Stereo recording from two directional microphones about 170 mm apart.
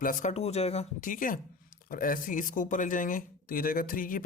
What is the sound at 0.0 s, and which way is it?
Speech, 50° left (ahead or behind).